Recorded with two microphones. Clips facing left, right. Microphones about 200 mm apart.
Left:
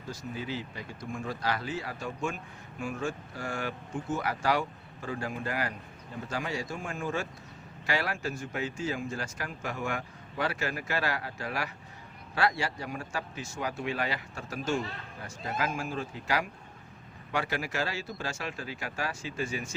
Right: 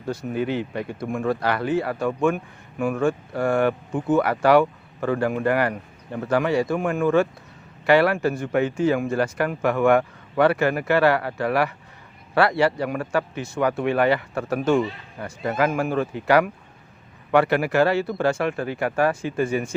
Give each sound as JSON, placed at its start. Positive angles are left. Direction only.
{"t": 0.1, "sound": "speech", "side_deg": -60}